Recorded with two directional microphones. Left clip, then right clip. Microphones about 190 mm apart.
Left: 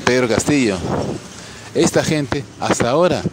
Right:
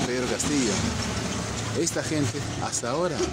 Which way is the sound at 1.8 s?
50° left (ahead or behind).